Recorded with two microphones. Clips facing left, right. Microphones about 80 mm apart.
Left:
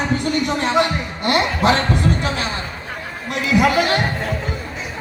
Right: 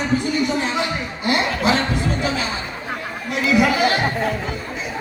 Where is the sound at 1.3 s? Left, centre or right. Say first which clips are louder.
Left 2 dB; left.